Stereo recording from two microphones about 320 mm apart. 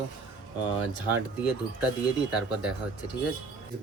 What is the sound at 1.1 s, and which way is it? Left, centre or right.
Speech, centre.